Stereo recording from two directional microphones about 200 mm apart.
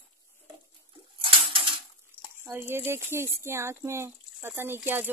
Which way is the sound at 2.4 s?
10° right (ahead or behind).